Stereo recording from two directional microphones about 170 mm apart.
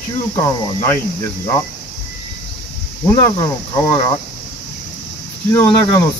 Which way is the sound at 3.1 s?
15° left (ahead or behind).